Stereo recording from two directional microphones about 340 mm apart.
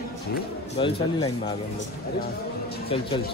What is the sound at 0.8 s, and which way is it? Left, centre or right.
Speech, centre.